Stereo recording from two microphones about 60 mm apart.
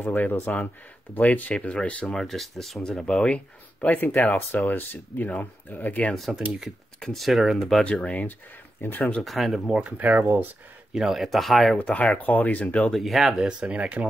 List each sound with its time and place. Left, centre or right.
0.0 s speech: left
2.0 s speech: centre
3.3 s speech: left
7.0 s speech: centre
7.2 s speech: centre
7.8 s speech: centre
8.8 s speech: left
9.2 s speech: centre
9.8 s speech: right
10.9 s speech: centre
12.1 s speech: left
12.9 s speech: centre
13.6 s speech: centre